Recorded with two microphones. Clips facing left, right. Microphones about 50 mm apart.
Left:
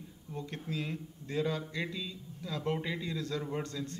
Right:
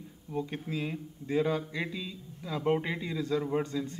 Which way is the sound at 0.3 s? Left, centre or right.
Centre.